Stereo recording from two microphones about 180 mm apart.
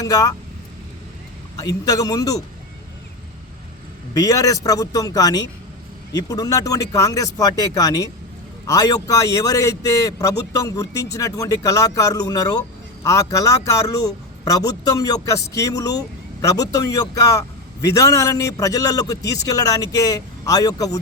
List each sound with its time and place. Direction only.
0.0 s speech: 20° left (ahead or behind)
1.5 s speech: 20° left (ahead or behind)
4.1 s speech: 20° left (ahead or behind)